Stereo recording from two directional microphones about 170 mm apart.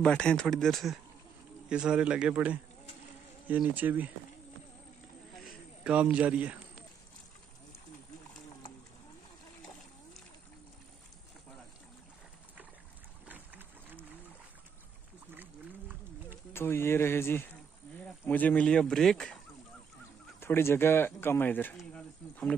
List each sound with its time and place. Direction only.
0.0 s speech: 5° left (ahead or behind); by 4.1 s 10° right (ahead or behind)
5.9 s a man's voice: 10° right (ahead or behind)
13.3 s a sound: 10° right (ahead or behind)
16.5 s speech: 15° left (ahead or behind)
20.3 s speech: 15° left (ahead or behind)